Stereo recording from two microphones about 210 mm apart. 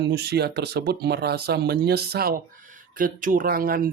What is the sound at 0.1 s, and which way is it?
Speech, 50° right (ahead or behind).